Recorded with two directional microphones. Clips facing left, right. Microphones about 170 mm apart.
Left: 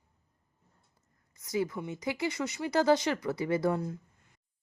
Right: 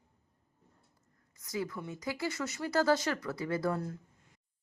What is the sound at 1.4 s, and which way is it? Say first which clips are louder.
Speech: left 5 dB; 20° left (ahead or behind).